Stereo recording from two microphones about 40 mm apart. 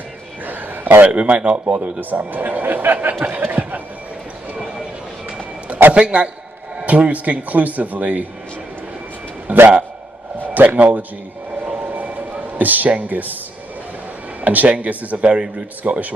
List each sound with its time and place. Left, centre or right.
0.5 s a sound: right
1.0 s a man's voice: right
5.9 s a man's voice: right
9.5 s a man's voice: right
10.4 s a sound: right
10.8 s a man's voice: right
11.8 s a sound: right
12.5 s a man's voice: right
14.4 s speech: right
15.8 s a man's voice: right